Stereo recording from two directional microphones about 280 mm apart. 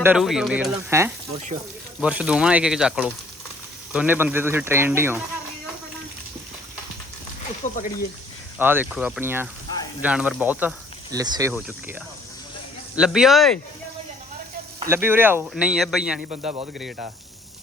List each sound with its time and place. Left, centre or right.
0.0 s speech: centre
7.6 s speech: left
8.5 s speech: centre
13.0 s speech: centre
14.8 s speech: centre
16.3 s speech: right